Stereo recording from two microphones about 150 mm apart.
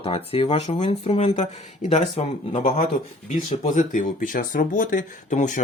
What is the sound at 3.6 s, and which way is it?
Speech, 55° left (ahead or behind).